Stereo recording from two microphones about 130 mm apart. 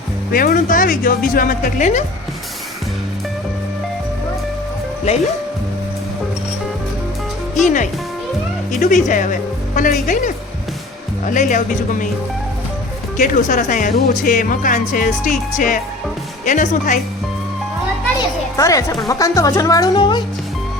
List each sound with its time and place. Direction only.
0.3 s a woman's voice: 90° left; by 2.0 s 65° left (ahead or behind)
5.1 s speech: 55° left (ahead or behind)
7.6 s speech: 75° left (ahead or behind)
13.1 s speech: 75° left (ahead or behind)
16.5 s speech: 75° left (ahead or behind)
18.5 s speech: 25° left (ahead or behind)